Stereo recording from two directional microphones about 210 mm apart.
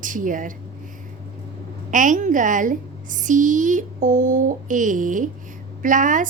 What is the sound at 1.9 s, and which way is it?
A woman's voice, 40° right (ahead or behind).